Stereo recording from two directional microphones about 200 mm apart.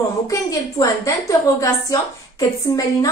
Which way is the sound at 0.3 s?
15° left (ahead or behind).